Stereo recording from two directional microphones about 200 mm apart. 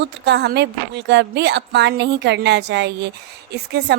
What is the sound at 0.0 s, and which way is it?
A woman's voice, 55° right (ahead or behind).